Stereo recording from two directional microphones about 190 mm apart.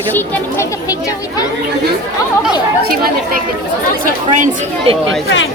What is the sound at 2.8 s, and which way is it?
Speech, 50° right (ahead or behind).